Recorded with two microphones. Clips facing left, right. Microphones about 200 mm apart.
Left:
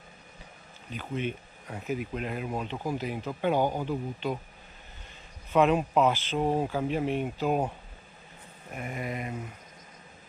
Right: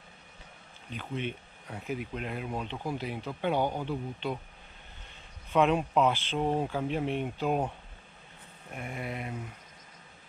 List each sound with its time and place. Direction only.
0.8 s speech: 5° left (ahead or behind)
5.5 s speech: 5° left (ahead or behind)